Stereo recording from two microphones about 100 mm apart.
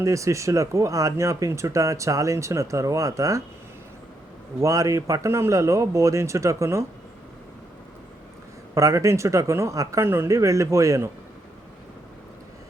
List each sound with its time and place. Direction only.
0.0 s speech: 30° right (ahead or behind)
4.6 s speech: 35° right (ahead or behind)
8.7 s speech: 35° right (ahead or behind)